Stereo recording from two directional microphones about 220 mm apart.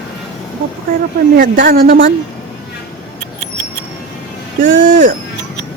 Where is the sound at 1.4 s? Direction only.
40° right (ahead or behind).